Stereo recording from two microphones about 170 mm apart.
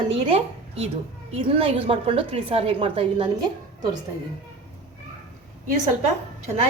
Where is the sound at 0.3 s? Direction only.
35° right (ahead or behind).